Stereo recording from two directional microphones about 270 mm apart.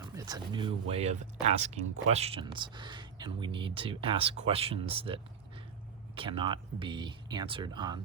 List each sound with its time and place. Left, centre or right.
0.0 s speech: centre